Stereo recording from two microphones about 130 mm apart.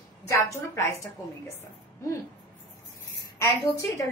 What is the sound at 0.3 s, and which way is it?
Speech, 25° left (ahead or behind).